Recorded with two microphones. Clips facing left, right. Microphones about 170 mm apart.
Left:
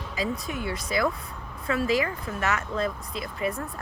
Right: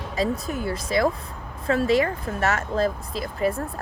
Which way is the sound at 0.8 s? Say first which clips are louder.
Right 5 dB; 30° right (ahead or behind).